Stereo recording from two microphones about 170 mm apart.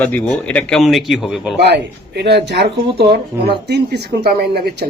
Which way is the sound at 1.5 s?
80° right.